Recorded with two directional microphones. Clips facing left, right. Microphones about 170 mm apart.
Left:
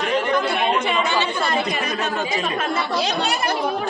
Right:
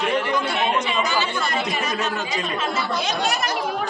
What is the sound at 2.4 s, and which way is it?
Speech, 55° left (ahead or behind).